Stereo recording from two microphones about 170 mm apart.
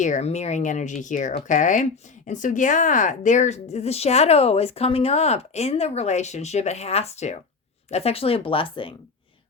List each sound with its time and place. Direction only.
0.0 s speech: 45° left (ahead or behind)